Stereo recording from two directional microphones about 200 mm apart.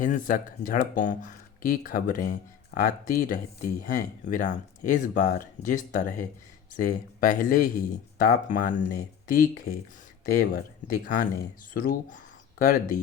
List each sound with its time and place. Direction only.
0.0 s speech: 40° left (ahead or behind)